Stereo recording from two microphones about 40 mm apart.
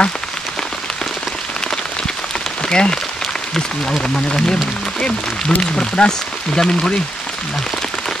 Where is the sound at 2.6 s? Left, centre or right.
Left.